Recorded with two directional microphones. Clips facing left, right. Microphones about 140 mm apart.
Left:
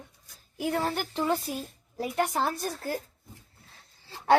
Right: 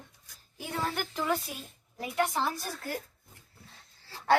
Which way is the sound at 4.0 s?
20° left (ahead or behind).